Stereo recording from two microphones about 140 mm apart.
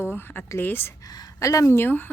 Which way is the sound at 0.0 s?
15° left (ahead or behind).